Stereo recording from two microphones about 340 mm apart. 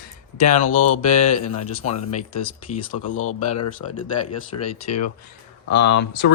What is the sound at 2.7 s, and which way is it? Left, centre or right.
Speech, centre.